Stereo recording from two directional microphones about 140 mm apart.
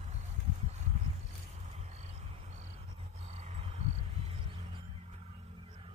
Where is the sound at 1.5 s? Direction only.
50° right (ahead or behind).